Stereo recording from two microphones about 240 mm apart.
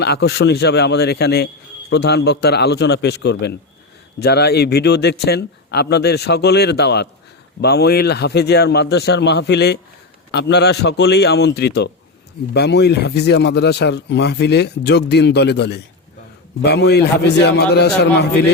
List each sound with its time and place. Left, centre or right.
0.0 s speech: left